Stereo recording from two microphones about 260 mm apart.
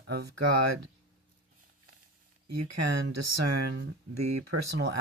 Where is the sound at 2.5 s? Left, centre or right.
Right.